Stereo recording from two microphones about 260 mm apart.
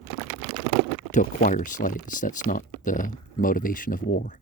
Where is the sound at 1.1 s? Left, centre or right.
Left.